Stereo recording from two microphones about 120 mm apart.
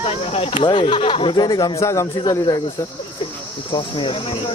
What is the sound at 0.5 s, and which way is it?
Speech, 40° left (ahead or behind).